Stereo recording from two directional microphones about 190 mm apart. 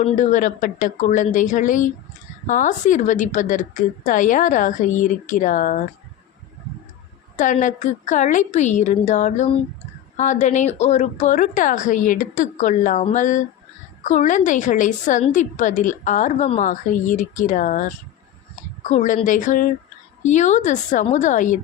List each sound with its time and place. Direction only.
0.0 s a woman's voice: 40° left (ahead or behind)
7.3 s a woman's voice: 40° left (ahead or behind)